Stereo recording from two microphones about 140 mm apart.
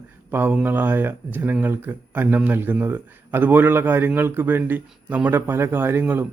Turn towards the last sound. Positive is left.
turn(degrees=-15)  # may be behind; listen again after turning